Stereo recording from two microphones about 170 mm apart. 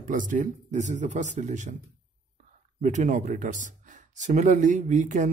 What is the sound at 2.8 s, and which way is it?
Speech, 45° right (ahead or behind).